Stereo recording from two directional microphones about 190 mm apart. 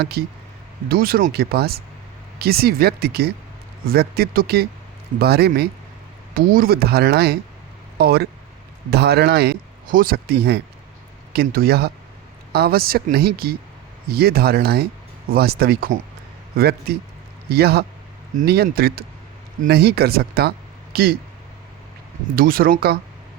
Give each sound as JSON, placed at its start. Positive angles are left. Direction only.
{"t": 0.0, "sound": "speech", "side_deg": -55}
{"t": 22.4, "sound": "speech", "side_deg": -50}